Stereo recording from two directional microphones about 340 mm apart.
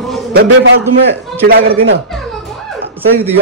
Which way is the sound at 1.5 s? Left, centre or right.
Right.